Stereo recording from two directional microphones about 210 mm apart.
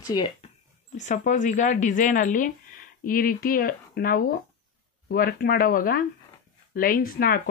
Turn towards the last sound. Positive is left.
turn(degrees=45)  # may be behind; listen again after turning